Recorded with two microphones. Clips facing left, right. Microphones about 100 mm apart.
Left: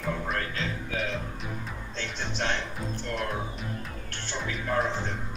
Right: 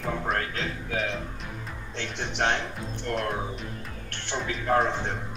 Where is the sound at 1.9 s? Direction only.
60° right (ahead or behind).